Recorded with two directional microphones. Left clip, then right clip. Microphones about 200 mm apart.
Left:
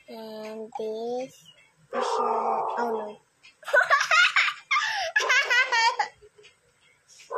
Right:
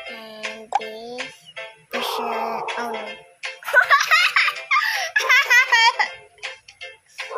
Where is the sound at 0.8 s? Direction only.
25° left (ahead or behind).